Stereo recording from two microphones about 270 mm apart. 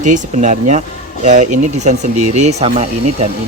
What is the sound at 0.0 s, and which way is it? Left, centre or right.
Speech, right.